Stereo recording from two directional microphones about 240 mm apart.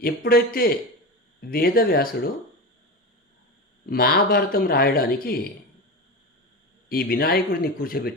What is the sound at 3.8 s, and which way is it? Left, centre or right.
Speech, left.